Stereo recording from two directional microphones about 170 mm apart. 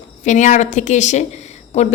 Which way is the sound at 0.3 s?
45° left (ahead or behind).